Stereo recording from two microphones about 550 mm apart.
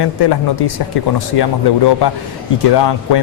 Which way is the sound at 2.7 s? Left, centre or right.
Left.